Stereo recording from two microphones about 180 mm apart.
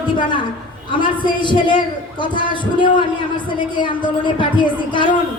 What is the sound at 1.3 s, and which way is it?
Speech, 25° left (ahead or behind).